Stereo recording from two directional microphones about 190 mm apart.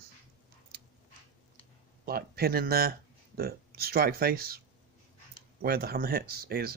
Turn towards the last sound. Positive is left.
turn(degrees=-55)  # may be behind; listen again after turning